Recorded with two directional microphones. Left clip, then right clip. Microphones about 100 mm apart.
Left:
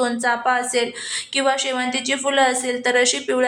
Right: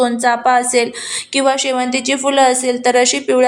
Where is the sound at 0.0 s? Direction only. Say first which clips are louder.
Right 6 dB; 30° right (ahead or behind).